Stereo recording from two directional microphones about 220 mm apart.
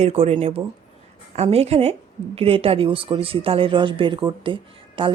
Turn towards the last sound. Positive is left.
turn(degrees=-25)  # may be behind; listen again after turning